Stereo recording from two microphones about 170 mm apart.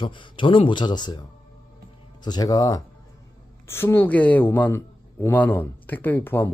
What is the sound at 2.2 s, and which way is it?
A man's voice, 25° left (ahead or behind).